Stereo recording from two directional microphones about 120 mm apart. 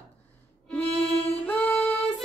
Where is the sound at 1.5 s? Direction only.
10° left (ahead or behind).